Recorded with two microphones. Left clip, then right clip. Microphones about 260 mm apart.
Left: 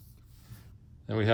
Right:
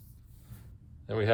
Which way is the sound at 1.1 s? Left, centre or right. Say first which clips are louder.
Even; left.